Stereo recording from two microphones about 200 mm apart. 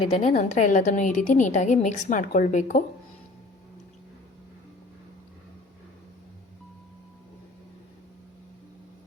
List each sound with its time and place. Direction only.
0.1 s a woman's voice: 35° left (ahead or behind)